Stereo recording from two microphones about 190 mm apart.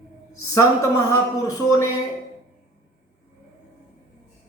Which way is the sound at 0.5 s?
15° left (ahead or behind).